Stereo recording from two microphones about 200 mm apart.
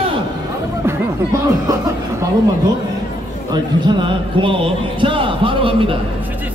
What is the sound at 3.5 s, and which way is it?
A man's voice, 20° right (ahead or behind).